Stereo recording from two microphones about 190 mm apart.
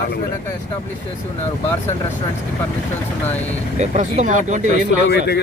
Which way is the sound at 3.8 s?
40° right (ahead or behind).